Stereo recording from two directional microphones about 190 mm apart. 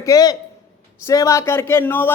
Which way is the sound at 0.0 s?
20° left (ahead or behind).